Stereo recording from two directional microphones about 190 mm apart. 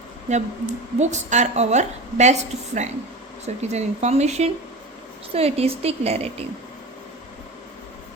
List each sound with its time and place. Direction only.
0.3 s a woman's voice: 35° right (ahead or behind)